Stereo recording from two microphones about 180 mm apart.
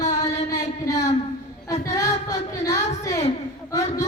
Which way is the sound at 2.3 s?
20° left (ahead or behind).